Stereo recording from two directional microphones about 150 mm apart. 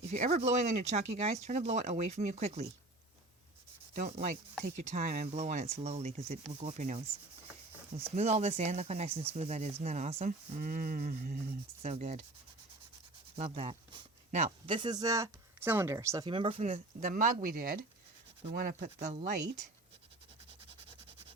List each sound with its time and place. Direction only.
0.1 s speech: 50° right (ahead or behind)
3.9 s speech: 55° right (ahead or behind)
5.3 s speech: 50° right (ahead or behind)
8.1 s speech: 45° right (ahead or behind)
10.6 s speech: 60° right (ahead or behind)
13.3 s speech: 45° right (ahead or behind)
14.7 s speech: 30° right (ahead or behind)
17.1 s speech: 65° right (ahead or behind)